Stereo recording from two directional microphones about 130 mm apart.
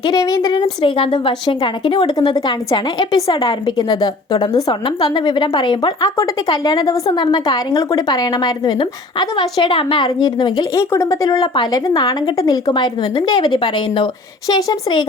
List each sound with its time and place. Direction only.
0.0 s a woman's voice: 30° left (ahead or behind)